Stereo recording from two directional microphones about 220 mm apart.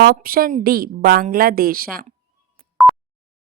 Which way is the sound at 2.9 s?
5° right (ahead or behind).